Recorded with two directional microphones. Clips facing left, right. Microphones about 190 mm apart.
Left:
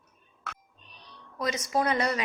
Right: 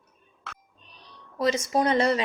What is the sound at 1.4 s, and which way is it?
Speech, 30° right (ahead or behind).